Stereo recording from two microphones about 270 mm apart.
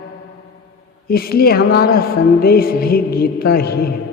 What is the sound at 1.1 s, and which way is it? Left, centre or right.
A man's voice, left.